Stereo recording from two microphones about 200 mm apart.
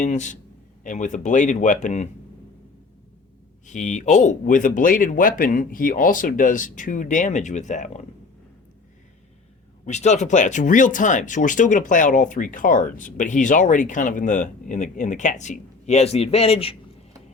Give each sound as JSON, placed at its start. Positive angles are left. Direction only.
{"t": 0.0, "sound": "speech", "side_deg": 35}
{"t": 3.7, "sound": "speech", "side_deg": 35}
{"t": 9.8, "sound": "speech", "side_deg": 35}